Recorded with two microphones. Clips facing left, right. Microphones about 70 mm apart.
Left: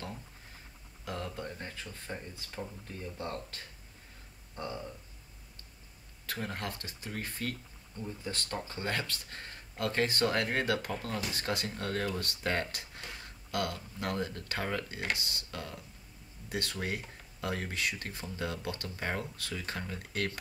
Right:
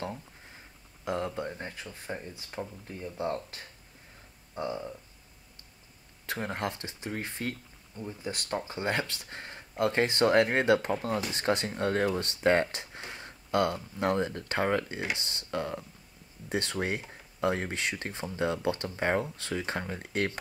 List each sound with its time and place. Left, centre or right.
1.0 s speech: right
6.2 s speech: right